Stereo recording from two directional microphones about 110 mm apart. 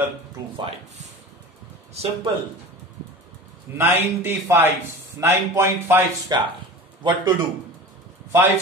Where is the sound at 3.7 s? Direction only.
20° right (ahead or behind).